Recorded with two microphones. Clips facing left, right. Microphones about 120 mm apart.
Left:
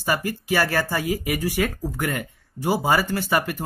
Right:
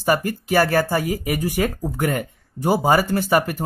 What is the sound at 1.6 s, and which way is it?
Speech, 30° right (ahead or behind).